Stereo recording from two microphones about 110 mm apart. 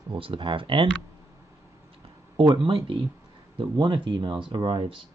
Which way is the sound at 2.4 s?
50° right (ahead or behind).